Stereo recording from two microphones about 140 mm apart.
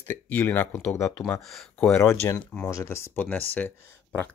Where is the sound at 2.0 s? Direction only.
20° left (ahead or behind).